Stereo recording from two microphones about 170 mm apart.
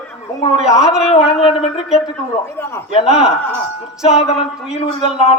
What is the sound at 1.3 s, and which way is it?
Speech, 35° left (ahead or behind).